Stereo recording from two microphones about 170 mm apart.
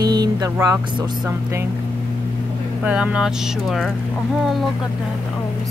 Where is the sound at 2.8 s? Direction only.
5° right (ahead or behind).